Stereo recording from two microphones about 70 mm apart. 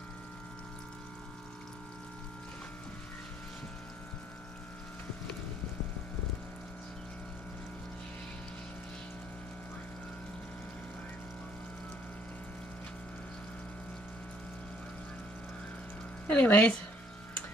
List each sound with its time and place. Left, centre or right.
16.3 s speech: left